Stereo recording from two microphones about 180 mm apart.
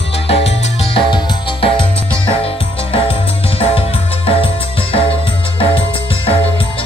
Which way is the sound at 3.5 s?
30° left (ahead or behind).